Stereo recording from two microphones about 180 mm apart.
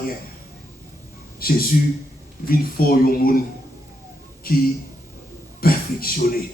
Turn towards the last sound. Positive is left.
turn(degrees=55)  # may be behind; listen again after turning